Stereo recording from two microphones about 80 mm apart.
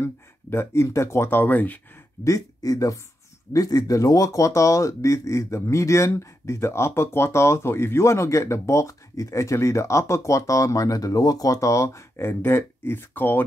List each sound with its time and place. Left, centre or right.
0.0 s speech: left
2.2 s speech: left